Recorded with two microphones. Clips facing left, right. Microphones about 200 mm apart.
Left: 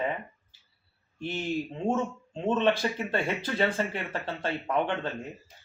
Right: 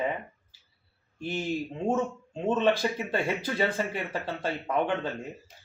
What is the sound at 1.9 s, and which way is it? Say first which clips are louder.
Speech: right 1 dB; 5° right (ahead or behind).